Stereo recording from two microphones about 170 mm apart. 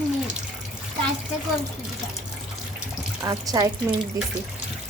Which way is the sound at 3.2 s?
20° right (ahead or behind).